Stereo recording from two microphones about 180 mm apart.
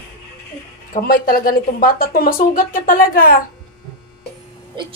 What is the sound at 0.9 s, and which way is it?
Speech, 55° left (ahead or behind).